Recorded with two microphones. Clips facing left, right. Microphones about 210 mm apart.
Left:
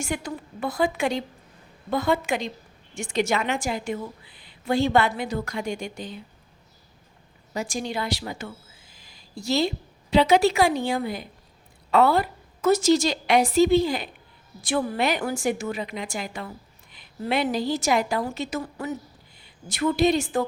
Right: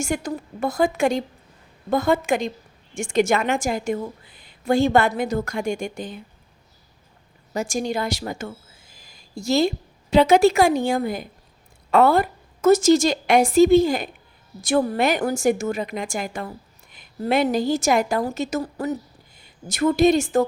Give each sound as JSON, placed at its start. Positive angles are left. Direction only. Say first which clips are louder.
{"t": 0.0, "sound": "a woman's voice", "louder": "right 4 dB", "side_deg": -45}
{"t": 7.5, "sound": "a woman's voice", "louder": "right 4 dB", "side_deg": -45}